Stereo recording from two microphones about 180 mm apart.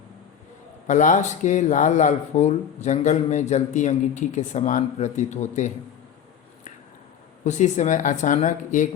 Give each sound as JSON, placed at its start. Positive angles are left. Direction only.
{"t": 0.9, "sound": "speech", "side_deg": 40}
{"t": 7.4, "sound": "speech", "side_deg": 40}